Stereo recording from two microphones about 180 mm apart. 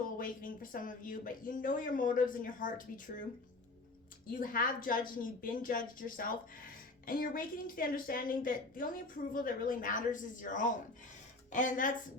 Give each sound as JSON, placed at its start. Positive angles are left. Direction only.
{"t": 0.0, "sound": "speech", "side_deg": 50}
{"t": 4.4, "sound": "speech", "side_deg": 50}